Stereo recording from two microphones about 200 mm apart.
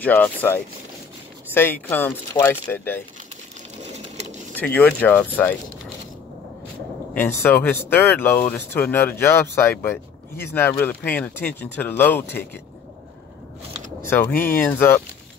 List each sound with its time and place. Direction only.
0.0 s speech: 10° left (ahead or behind)
3.9 s sewing machine: 35° right (ahead or behind)
4.7 s speech: 5° left (ahead or behind)
7.2 s speech: 10° left (ahead or behind)
14.0 s speech: 10° left (ahead or behind)